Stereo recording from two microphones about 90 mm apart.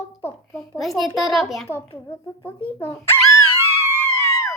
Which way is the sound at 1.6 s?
25° left (ahead or behind).